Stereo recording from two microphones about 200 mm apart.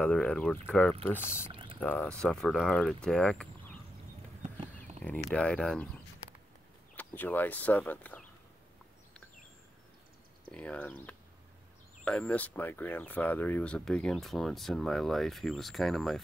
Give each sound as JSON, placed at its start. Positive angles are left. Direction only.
{"t": 0.0, "sound": "speech", "side_deg": 5}
{"t": 1.5, "sound": "boiling", "side_deg": -25}
{"t": 1.8, "sound": "speech", "side_deg": 10}
{"t": 5.0, "sound": "speech", "side_deg": 5}
{"t": 7.0, "sound": "speech", "side_deg": 10}
{"t": 10.5, "sound": "speech", "side_deg": 5}